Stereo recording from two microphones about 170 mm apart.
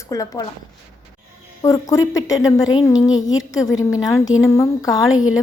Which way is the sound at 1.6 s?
20° left (ahead or behind).